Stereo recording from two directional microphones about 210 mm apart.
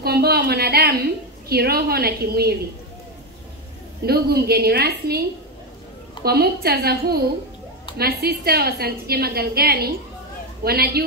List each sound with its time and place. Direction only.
0.0 s a woman's voice: 50° right (ahead or behind)
4.0 s a woman's voice: 50° right (ahead or behind)
6.2 s a woman's voice: 50° right (ahead or behind)